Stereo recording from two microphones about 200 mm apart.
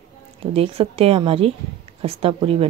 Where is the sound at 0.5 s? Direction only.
30° right (ahead or behind).